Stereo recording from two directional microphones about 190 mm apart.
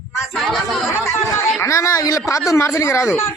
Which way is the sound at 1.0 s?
10° left (ahead or behind).